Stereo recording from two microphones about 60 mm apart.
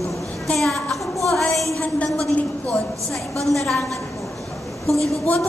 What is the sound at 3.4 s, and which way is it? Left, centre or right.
Speech, centre.